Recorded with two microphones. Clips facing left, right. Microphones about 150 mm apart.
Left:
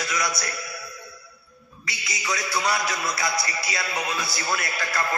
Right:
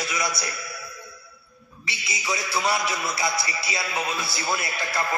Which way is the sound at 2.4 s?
5° right (ahead or behind).